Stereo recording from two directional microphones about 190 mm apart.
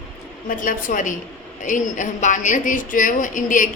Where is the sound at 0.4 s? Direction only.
45° left (ahead or behind).